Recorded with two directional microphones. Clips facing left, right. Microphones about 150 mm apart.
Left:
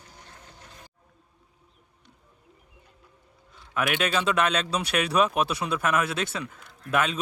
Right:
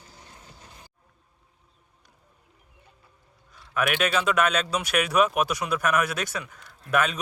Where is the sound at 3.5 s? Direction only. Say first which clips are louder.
Right 1 dB; 25° left (ahead or behind).